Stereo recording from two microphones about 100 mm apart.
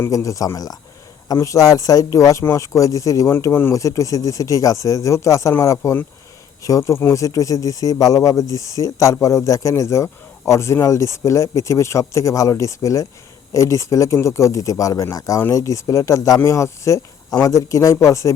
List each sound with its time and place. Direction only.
0.1 s speech: 35° left (ahead or behind)